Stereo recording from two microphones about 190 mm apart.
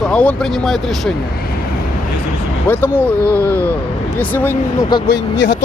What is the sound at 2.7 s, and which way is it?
Speech, 10° left (ahead or behind).